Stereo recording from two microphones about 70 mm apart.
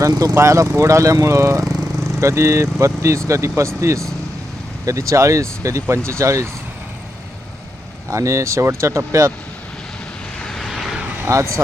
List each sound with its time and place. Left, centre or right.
0.1 s speech: right
0.3 s speech: right
8.1 s speech: right
10.4 s vehicle: centre
11.3 s speech: right